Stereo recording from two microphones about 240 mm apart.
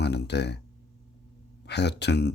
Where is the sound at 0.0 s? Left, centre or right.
Left.